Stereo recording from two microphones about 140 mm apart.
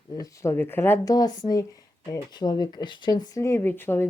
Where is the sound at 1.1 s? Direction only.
25° left (ahead or behind).